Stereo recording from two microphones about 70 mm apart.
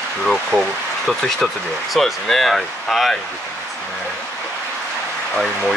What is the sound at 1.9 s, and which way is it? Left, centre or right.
Speech, centre.